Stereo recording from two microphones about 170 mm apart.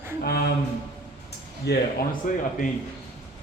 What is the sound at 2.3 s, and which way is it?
Speech, 55° left (ahead or behind).